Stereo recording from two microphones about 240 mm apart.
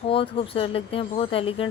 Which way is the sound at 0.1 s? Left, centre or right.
Left.